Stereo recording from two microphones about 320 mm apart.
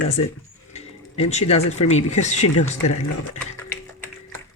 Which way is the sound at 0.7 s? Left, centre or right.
Centre.